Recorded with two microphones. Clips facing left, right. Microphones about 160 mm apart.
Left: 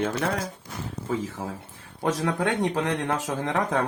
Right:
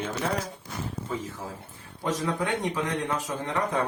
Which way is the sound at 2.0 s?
75° left (ahead or behind).